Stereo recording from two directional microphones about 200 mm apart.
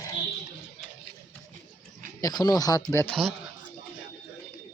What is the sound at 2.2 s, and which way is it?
Speech, 20° left (ahead or behind).